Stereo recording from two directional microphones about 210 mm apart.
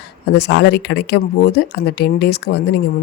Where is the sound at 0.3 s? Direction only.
55° left (ahead or behind).